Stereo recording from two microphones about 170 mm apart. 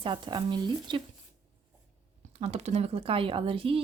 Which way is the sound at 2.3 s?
35° right (ahead or behind).